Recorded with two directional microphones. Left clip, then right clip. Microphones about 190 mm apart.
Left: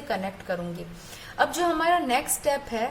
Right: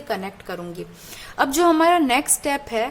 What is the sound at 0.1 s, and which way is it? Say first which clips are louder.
A woman's voice: right 1 dB; 40° right (ahead or behind).